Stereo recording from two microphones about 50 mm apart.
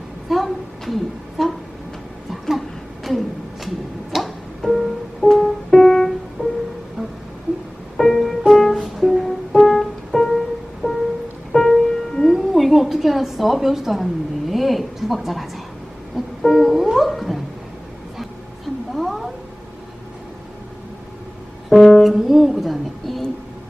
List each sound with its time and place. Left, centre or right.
0.3 s speech: centre
2.3 s a sound: centre
4.1 s music: centre
6.4 s music: right
7.9 s music: centre
11.5 s music: centre
18.2 s a sound: centre
21.8 s music: centre
22.0 s music: centre